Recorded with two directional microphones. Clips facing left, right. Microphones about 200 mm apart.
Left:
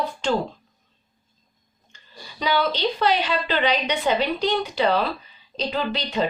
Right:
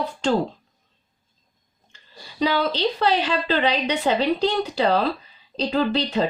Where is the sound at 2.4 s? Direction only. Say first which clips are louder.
Right 1 dB; 35° right (ahead or behind).